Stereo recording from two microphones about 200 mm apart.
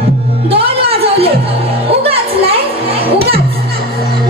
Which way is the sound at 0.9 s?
30° right (ahead or behind).